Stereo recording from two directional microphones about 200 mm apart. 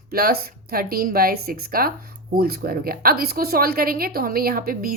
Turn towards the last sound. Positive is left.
turn(degrees=-45)  # may be behind; listen again after turning